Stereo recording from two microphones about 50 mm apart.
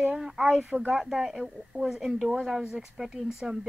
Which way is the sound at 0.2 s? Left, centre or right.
Centre.